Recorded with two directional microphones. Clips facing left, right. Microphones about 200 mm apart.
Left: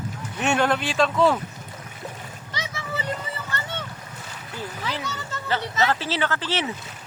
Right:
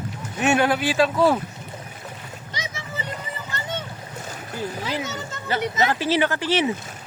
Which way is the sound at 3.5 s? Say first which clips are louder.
Left 1 dB; 15° right (ahead or behind).